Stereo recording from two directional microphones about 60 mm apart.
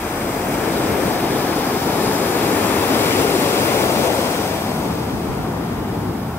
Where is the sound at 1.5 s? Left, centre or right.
Left.